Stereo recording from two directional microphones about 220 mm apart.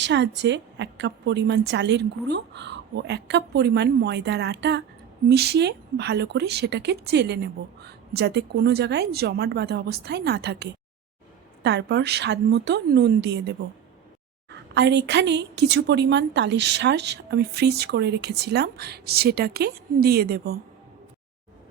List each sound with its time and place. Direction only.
0.0 s a woman's voice: 55° right (ahead or behind)